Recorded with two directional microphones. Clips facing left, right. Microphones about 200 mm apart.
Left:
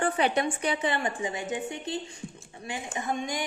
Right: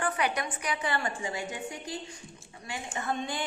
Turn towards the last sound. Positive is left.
turn(degrees=15)  # may be behind; listen again after turning